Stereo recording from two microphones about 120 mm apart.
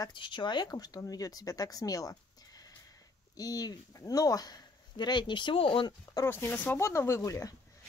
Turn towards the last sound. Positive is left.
turn(degrees=25)  # may be behind; listen again after turning